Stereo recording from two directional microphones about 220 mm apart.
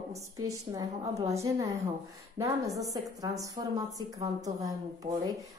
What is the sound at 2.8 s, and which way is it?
A woman's voice, 15° right (ahead or behind).